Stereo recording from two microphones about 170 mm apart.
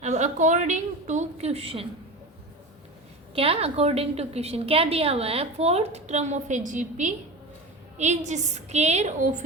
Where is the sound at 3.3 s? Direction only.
35° right (ahead or behind).